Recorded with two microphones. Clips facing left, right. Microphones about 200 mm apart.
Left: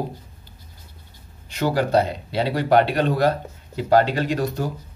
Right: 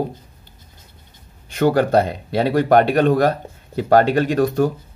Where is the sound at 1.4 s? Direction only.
55° right (ahead or behind).